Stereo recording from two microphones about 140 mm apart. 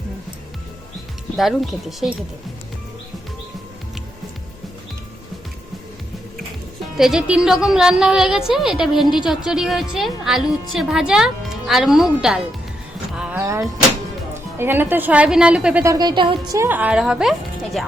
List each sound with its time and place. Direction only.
1.4 s a woman's voice: centre (ahead or behind)
6.9 s a woman's voice: 5° right (ahead or behind)
13.4 s vehicle: 20° right (ahead or behind)
14.3 s a woman's voice: 15° right (ahead or behind)
15.8 s speech: 25° right (ahead or behind)
16.5 s a woman's voice: 15° right (ahead or behind)